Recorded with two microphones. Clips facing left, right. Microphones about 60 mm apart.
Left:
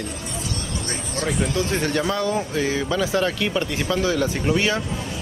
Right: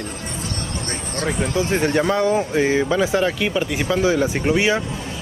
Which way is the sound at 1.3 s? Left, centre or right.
Right.